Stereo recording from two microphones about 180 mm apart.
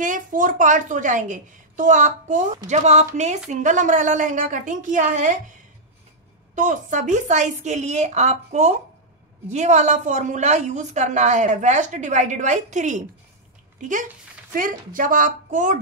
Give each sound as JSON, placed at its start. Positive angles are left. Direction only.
{"t": 0.0, "sound": "a woman's voice", "side_deg": -45}
{"t": 6.5, "sound": "a woman's voice", "side_deg": -45}